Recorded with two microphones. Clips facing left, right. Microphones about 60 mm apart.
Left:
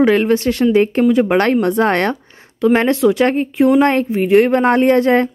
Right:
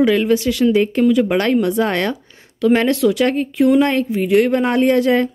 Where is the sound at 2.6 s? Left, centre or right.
Left.